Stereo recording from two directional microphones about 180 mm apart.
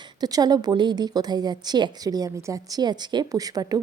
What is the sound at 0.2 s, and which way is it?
A woman's voice, 20° right (ahead or behind).